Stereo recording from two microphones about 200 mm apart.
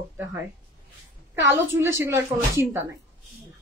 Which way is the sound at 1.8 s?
15° right (ahead or behind).